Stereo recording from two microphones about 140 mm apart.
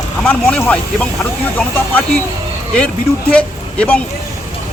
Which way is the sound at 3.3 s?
10° left (ahead or behind).